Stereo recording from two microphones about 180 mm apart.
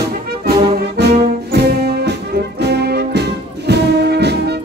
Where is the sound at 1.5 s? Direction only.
65° right (ahead or behind).